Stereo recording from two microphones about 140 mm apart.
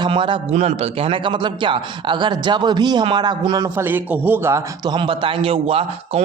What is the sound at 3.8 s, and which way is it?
A man's voice, 15° right (ahead or behind).